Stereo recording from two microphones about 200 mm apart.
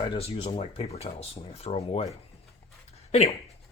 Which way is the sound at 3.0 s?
30° left (ahead or behind).